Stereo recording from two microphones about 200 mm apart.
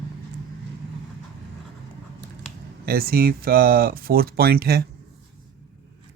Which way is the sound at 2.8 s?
50° right (ahead or behind).